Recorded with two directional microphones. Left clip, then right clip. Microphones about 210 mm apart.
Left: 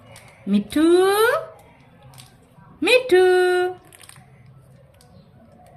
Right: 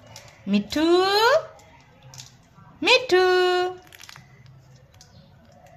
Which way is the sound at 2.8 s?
15° right (ahead or behind).